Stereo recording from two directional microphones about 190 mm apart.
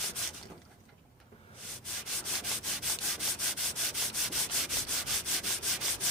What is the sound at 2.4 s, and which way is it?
Rub, centre (ahead or behind).